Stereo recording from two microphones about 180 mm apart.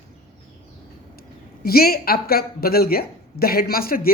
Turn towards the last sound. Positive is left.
turn(degrees=55)  # may be behind; listen again after turning